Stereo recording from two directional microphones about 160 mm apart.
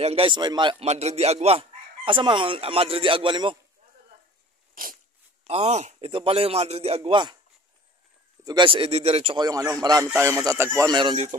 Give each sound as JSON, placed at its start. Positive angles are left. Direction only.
{"t": 0.0, "sound": "speech", "side_deg": -35}
{"t": 0.8, "sound": "speech", "side_deg": -40}
{"t": 5.5, "sound": "speech", "side_deg": -45}
{"t": 8.5, "sound": "speech", "side_deg": -30}
{"t": 9.4, "sound": "a man's voice", "side_deg": -20}
{"t": 11.0, "sound": "a man's voice", "side_deg": -30}